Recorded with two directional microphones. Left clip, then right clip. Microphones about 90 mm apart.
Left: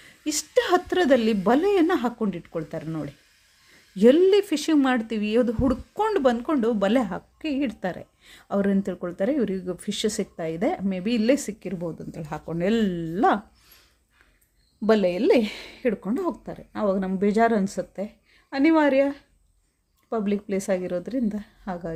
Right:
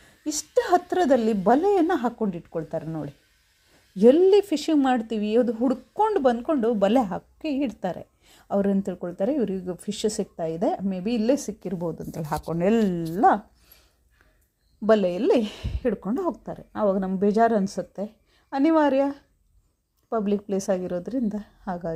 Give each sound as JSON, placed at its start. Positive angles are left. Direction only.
{"t": 0.3, "sound": "a woman's voice", "side_deg": 5}
{"t": 3.9, "sound": "a woman's voice", "side_deg": 0}
{"t": 5.9, "sound": "speech", "side_deg": 10}
{"t": 6.7, "sound": "a woman's voice", "side_deg": -15}
{"t": 11.6, "sound": "a woman's voice", "side_deg": -15}
{"t": 12.5, "sound": "speech", "side_deg": -10}
{"t": 13.2, "sound": "a sound", "side_deg": 5}
{"t": 14.8, "sound": "speech", "side_deg": -10}
{"t": 20.2, "sound": "a woman's voice", "side_deg": -20}